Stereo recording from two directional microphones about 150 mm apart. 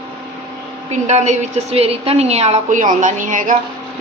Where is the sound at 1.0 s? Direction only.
50° right (ahead or behind).